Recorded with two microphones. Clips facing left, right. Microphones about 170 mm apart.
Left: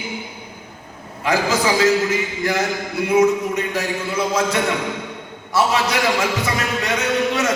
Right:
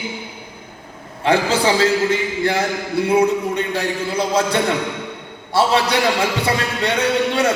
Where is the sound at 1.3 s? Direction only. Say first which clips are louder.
Right 2 dB; 30° right (ahead or behind).